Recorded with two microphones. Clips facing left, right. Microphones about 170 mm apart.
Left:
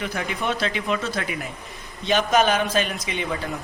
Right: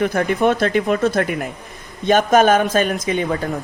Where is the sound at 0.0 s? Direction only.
55° right (ahead or behind).